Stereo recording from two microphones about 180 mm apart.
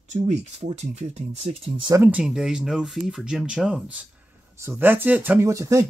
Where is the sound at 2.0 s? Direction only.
5° right (ahead or behind).